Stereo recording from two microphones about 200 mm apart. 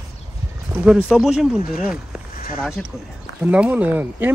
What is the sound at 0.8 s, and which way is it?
Speech, 5° right (ahead or behind).